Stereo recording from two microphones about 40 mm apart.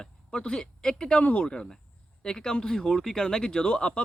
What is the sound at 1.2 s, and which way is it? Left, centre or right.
Speech, left.